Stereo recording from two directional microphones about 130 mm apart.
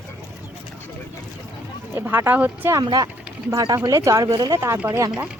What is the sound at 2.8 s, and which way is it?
Speech, 30° right (ahead or behind).